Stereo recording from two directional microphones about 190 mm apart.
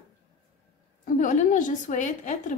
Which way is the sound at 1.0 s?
40° left (ahead or behind).